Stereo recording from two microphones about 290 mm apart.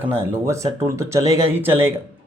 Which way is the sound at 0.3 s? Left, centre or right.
Centre.